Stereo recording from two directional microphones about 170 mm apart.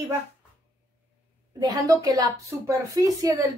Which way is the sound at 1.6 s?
20° right (ahead or behind).